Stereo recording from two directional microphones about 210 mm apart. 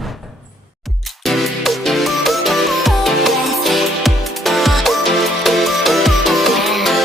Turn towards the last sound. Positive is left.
turn(degrees=0)  # may be behind; listen again after turning